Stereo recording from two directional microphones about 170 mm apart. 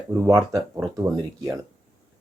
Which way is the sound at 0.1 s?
20° right (ahead or behind).